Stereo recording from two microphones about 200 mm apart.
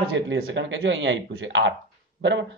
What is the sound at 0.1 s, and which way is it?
A man's voice, 70° right (ahead or behind).